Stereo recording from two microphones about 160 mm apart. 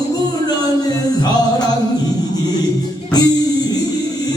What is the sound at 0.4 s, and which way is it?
Music, 25° left (ahead or behind).